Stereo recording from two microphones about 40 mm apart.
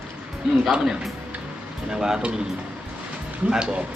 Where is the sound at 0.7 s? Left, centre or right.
Centre.